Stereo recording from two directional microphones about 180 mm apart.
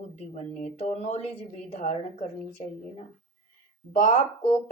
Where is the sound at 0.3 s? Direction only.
35° left (ahead or behind).